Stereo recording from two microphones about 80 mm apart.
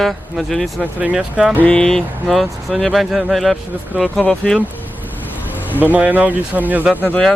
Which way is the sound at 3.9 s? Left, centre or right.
Centre.